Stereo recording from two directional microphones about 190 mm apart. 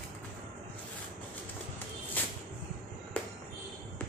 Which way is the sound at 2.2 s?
10° left (ahead or behind).